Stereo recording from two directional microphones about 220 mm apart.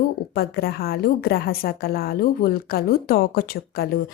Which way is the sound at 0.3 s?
45° left (ahead or behind).